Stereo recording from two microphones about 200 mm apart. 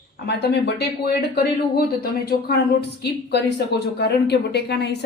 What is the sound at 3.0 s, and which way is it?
Speech, 55° left (ahead or behind).